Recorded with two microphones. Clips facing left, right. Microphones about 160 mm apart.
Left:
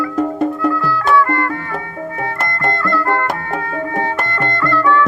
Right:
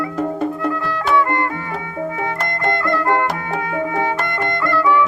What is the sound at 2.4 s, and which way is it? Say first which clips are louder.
Music: left 1 dB; 55° left (ahead or behind).